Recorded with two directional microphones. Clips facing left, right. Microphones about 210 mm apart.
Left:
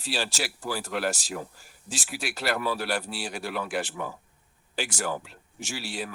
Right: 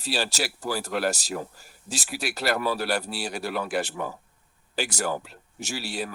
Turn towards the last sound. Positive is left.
turn(degrees=-40)  # may be behind; listen again after turning